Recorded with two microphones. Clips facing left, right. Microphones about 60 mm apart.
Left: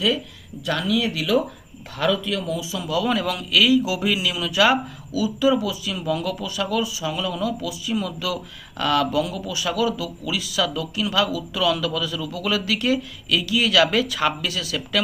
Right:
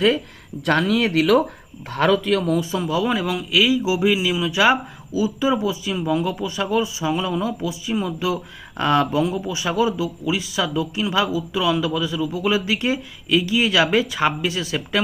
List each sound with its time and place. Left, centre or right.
0.6 s speech: right
2.8 s speech: right
3.1 s speech: centre